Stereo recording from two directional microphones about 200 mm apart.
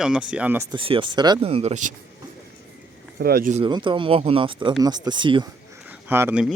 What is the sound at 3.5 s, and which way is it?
Speech, 25° right (ahead or behind).